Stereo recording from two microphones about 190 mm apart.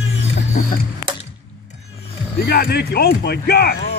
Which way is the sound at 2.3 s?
55° left (ahead or behind).